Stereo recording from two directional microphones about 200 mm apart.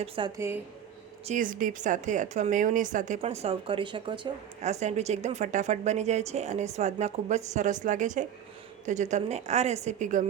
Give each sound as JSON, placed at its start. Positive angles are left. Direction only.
{"t": 0.2, "sound": "speech", "side_deg": -25}
{"t": 1.2, "sound": "a woman's voice", "side_deg": -40}
{"t": 4.6, "sound": "a woman's voice", "side_deg": -35}